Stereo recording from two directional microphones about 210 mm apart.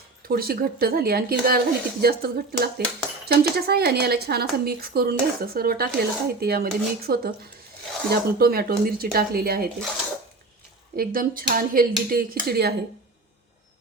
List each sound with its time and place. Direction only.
0.3 s speech: 45° right (ahead or behind)
10.9 s speech: 45° right (ahead or behind)